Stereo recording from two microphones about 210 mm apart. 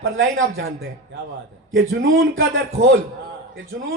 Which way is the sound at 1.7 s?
70° right (ahead or behind).